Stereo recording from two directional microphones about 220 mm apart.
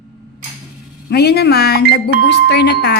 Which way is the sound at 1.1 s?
45° left (ahead or behind).